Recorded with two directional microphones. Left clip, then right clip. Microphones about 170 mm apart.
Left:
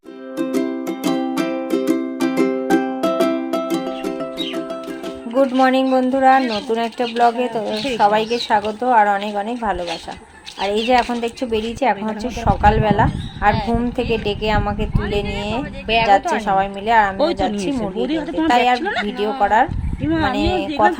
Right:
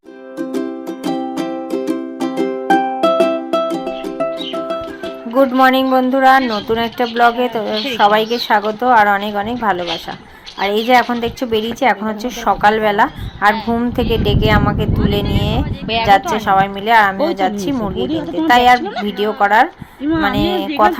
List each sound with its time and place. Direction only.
1.0 s music: 35° right (ahead or behind)
2.6 s music: 10° right (ahead or behind)
5.3 s a woman's voice: 15° right (ahead or behind)
18.4 s a woman's voice: 15° right (ahead or behind)